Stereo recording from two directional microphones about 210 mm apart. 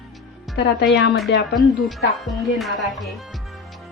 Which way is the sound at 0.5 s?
55° left (ahead or behind).